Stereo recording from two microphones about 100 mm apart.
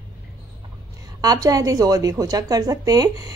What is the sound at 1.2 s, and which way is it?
A woman's voice, 40° right (ahead or behind).